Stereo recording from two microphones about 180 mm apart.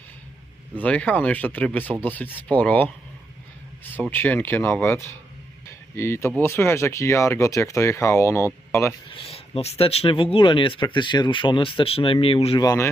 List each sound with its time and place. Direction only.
0.8 s speech: 5° left (ahead or behind)
4.1 s speech: 10° left (ahead or behind)
9.0 s speech: 30° left (ahead or behind)
12.6 s speech: 15° left (ahead or behind)